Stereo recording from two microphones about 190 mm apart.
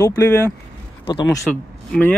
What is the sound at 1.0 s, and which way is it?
Speech, 20° left (ahead or behind).